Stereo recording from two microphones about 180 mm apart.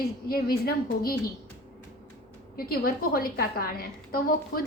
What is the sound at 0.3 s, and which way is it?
Speech, 55° left (ahead or behind).